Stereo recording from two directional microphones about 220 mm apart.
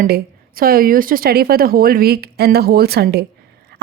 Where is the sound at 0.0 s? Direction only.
40° right (ahead or behind).